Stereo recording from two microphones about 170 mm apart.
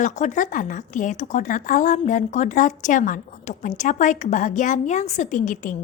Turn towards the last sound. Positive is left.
turn(degrees=50)  # may be behind; listen again after turning